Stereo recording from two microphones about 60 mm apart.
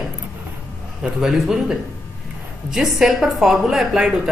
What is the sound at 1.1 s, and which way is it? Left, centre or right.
A woman's voice, centre.